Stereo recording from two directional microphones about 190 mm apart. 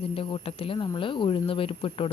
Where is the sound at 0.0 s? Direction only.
30° left (ahead or behind).